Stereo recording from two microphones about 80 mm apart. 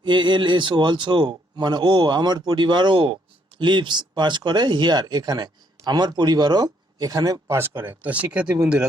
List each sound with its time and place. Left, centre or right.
0.0 s a man's voice: right
3.6 s speech: right
7.8 s speech: right